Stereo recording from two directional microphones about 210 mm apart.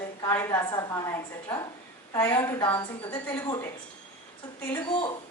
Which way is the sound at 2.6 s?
25° left (ahead or behind).